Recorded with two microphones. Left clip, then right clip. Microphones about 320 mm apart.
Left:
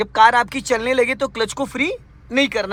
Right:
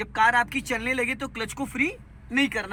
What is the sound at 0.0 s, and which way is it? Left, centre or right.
Speech, centre.